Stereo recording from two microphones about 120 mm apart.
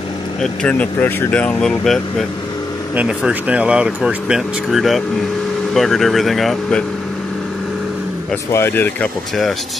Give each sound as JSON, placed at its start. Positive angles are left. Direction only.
{"t": 0.4, "sound": "speech", "side_deg": 10}
{"t": 3.0, "sound": "speech", "side_deg": -5}
{"t": 8.5, "sound": "speech", "side_deg": 20}